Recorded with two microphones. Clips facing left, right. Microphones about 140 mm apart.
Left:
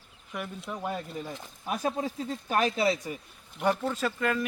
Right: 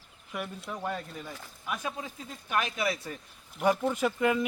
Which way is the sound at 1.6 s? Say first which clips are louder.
Left 6 dB; 35° left (ahead or behind).